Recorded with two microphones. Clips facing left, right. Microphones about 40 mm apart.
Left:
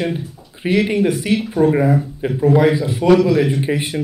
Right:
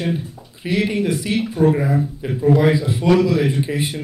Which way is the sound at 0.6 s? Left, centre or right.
Left.